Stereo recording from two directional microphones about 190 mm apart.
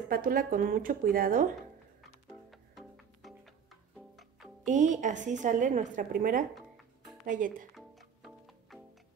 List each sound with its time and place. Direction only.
0.1 s a woman's voice: 50° right (ahead or behind)
2.7 s music: centre (ahead or behind)
4.6 s a woman's voice: 40° right (ahead or behind)